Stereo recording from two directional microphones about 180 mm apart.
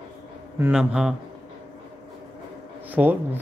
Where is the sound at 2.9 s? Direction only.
10° right (ahead or behind).